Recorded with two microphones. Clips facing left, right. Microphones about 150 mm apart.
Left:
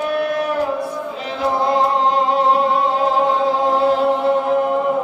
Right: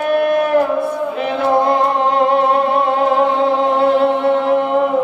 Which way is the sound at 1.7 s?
60° right (ahead or behind).